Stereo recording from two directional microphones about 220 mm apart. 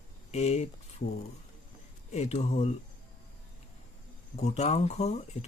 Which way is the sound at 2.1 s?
30° left (ahead or behind).